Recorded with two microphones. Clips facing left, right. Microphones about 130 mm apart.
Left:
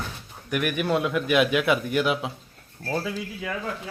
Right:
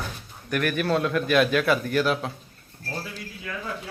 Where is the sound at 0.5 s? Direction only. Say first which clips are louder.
Even; 15° left (ahead or behind).